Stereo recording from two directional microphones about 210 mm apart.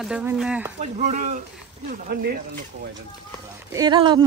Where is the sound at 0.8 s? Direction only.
35° right (ahead or behind).